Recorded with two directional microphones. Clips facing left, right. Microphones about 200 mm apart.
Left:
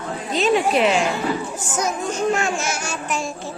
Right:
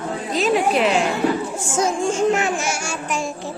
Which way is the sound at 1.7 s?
25° right (ahead or behind).